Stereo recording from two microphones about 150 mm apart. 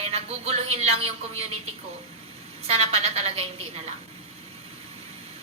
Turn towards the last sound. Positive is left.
turn(degrees=-40)  # may be behind; listen again after turning